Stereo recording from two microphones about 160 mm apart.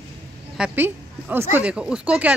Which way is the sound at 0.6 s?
10° right (ahead or behind).